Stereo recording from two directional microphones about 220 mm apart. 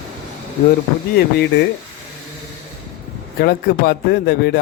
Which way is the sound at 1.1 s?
50° left (ahead or behind).